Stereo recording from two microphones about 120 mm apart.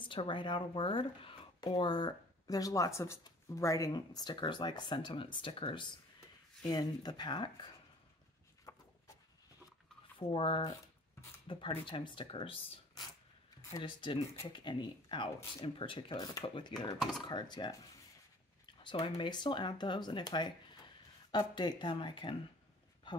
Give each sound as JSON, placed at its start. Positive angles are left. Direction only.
{"t": 0.0, "sound": "speech", "side_deg": 45}
{"t": 1.6, "sound": "speech", "side_deg": 35}
{"t": 8.7, "sound": "a sound", "side_deg": 30}
{"t": 10.1, "sound": "speech", "side_deg": 50}
{"t": 13.6, "sound": "a sound", "side_deg": 30}
{"t": 13.8, "sound": "speech", "side_deg": 45}
{"t": 18.8, "sound": "speech", "side_deg": 40}